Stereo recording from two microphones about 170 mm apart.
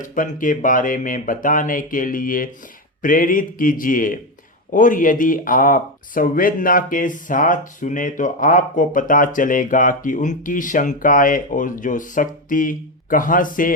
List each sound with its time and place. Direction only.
0.0 s speech: 50° left (ahead or behind)